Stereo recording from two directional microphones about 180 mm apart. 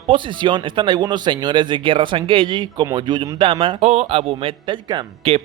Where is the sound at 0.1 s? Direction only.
25° right (ahead or behind).